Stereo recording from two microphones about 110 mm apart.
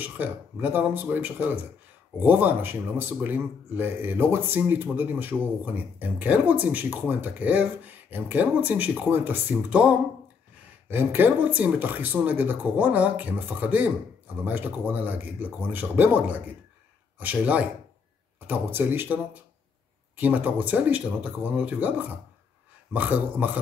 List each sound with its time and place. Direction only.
0.0 s speech: 15° right (ahead or behind)